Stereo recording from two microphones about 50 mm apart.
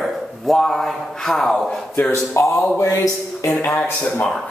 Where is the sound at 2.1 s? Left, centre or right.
Left.